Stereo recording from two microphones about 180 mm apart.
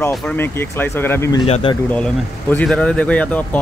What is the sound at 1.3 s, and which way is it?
Speech, 30° left (ahead or behind).